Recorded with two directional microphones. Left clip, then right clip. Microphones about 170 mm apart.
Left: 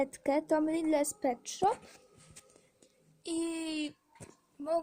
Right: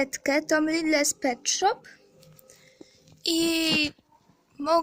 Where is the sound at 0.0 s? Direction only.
Centre (ahead or behind).